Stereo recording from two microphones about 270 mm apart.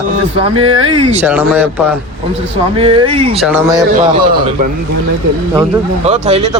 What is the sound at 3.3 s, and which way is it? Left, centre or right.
Speech, centre.